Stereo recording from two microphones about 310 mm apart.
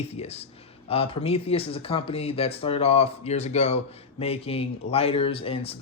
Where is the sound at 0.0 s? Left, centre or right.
Centre.